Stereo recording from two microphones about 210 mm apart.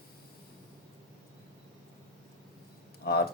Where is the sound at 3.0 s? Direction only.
50° left (ahead or behind).